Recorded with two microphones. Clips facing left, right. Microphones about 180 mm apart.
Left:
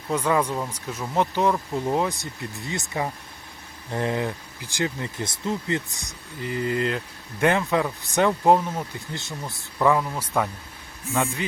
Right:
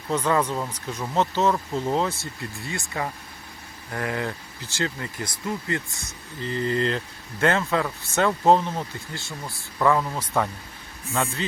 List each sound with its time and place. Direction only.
0.1 s speech: 10° left (ahead or behind)